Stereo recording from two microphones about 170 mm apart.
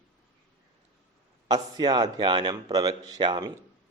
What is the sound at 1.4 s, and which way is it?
Speech, 25° right (ahead or behind).